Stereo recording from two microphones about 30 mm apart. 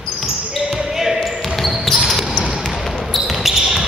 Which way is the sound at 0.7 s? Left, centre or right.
Centre.